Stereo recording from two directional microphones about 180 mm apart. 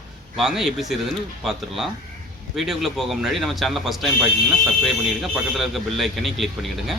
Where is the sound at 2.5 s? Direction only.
Centre (ahead or behind).